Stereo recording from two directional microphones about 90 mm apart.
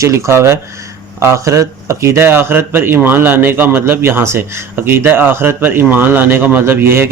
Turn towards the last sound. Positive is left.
turn(degrees=-25)  # may be behind; listen again after turning